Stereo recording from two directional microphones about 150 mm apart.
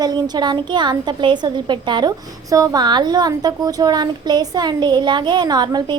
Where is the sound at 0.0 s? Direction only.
30° right (ahead or behind).